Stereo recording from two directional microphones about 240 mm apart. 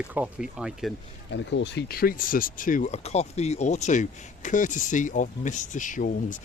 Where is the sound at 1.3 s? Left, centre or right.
Left.